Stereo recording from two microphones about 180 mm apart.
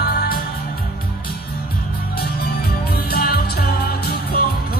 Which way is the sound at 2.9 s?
60° left (ahead or behind).